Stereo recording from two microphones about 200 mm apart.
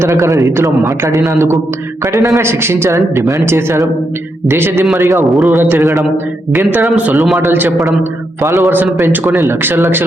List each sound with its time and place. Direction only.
0.0 s speech: 15° right (ahead or behind)
5.3 s a man's voice: centre (ahead or behind)
5.5 s speech: 10° right (ahead or behind)